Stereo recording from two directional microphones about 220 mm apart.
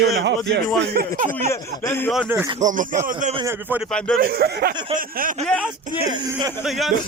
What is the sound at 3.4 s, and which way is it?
Speech, 10° right (ahead or behind).